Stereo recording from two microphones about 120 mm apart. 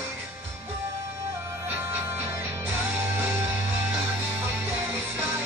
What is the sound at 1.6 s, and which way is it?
Music, 20° right (ahead or behind).